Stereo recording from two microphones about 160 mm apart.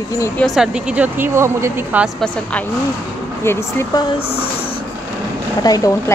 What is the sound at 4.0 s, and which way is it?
Speech, 35° left (ahead or behind).